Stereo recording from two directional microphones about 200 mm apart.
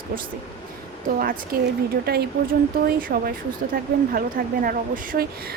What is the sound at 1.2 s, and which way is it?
Speech, 45° right (ahead or behind).